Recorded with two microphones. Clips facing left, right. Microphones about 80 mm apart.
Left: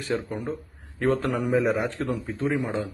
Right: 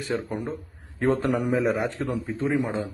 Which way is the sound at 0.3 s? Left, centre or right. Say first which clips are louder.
Even; centre.